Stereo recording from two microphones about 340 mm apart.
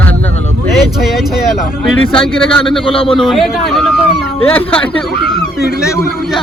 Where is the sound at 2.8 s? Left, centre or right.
Centre.